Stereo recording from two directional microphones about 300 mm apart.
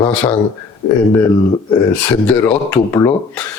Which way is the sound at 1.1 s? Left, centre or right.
Centre.